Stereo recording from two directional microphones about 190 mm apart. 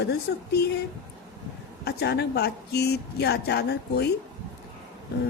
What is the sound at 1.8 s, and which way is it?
A woman's voice, 60° left (ahead or behind).